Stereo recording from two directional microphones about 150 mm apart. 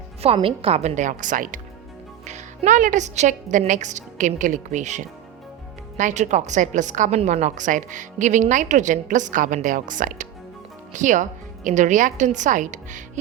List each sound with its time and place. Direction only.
0.3 s a woman's voice: 40° right (ahead or behind); by 13.0 s 55° right (ahead or behind)